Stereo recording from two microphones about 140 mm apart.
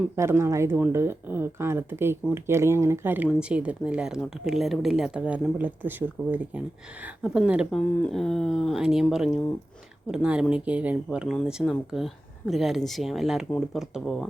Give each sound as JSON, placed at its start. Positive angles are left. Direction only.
{"t": 0.2, "sound": "speech", "side_deg": -20}